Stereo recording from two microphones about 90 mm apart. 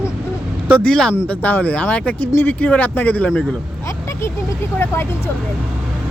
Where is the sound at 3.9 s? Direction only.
30° left (ahead or behind).